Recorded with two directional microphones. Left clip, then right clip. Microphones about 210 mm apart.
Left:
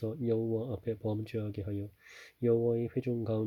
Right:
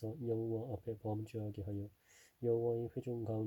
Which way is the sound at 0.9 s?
35° left (ahead or behind).